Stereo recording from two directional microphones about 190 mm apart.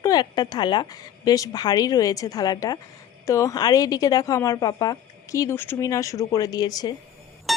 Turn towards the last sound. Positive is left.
turn(degrees=0)  # may be behind; listen again after turning